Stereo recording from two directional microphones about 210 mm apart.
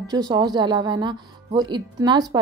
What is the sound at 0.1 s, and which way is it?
A woman's voice, 20° right (ahead or behind).